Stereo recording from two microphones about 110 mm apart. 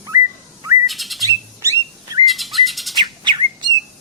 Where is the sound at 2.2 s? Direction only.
Centre (ahead or behind).